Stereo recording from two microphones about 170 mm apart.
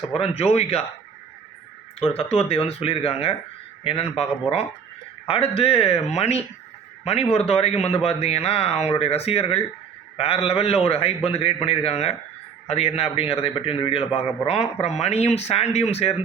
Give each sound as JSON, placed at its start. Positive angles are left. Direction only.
{"t": 0.2, "sound": "a man's voice", "side_deg": 40}
{"t": 2.0, "sound": "a man's voice", "side_deg": 35}